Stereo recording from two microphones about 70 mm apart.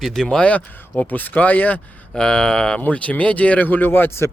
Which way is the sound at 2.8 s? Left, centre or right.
Left.